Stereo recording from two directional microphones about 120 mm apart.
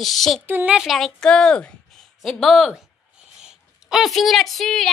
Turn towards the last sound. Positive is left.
turn(degrees=5)  # may be behind; listen again after turning